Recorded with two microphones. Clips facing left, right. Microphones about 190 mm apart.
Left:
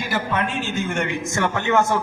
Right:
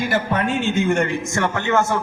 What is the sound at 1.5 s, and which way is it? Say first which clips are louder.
Speech: left 1 dB; 15° left (ahead or behind).